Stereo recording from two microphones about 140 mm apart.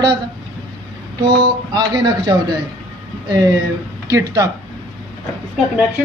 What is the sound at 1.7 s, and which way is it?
Speech, 30° right (ahead or behind).